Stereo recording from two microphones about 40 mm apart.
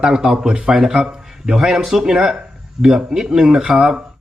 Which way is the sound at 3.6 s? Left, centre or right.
Right.